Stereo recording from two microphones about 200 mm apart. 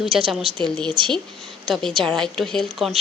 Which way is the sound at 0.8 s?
25° right (ahead or behind).